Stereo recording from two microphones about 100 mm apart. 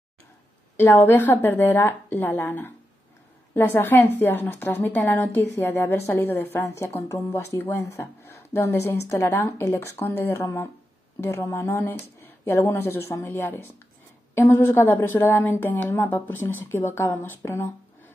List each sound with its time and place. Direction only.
0.7 s speech: 20° left (ahead or behind)